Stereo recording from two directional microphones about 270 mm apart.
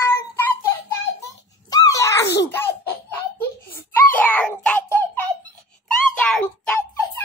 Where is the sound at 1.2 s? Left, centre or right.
Centre.